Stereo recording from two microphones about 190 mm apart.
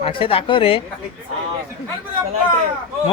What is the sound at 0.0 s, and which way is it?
Speech, 30° left (ahead or behind).